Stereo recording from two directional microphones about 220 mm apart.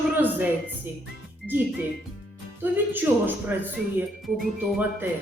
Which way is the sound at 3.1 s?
10° right (ahead or behind).